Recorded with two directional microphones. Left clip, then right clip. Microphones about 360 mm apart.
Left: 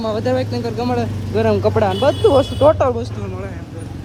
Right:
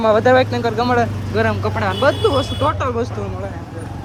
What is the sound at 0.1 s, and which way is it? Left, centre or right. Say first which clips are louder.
Speech: right 7 dB; centre.